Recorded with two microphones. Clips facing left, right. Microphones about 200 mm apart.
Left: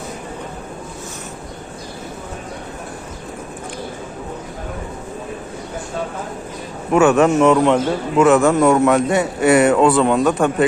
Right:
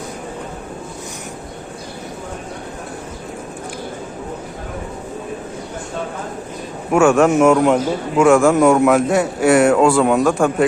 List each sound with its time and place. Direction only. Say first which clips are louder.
7.0 s a man's voice: right 1 dB; 5° left (ahead or behind)
7.3 s a man's voice: right 1 dB; 10° right (ahead or behind)